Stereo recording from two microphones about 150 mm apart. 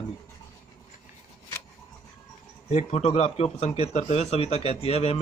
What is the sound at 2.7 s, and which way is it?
A man's voice, 45° left (ahead or behind).